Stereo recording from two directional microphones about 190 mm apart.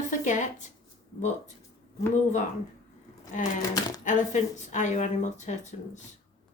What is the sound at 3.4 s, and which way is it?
Speech, 40° left (ahead or behind).